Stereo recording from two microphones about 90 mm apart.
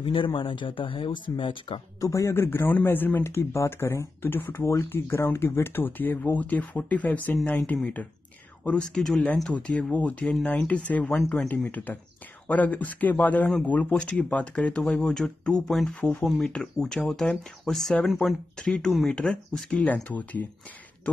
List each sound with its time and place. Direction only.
0.0 s speech: 70° left (ahead or behind)
2.0 s speech: 35° left (ahead or behind); by 20.4 s 15° left (ahead or behind)